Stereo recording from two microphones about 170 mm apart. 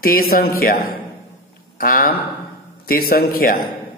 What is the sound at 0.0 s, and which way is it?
A man's voice, 60° left (ahead or behind).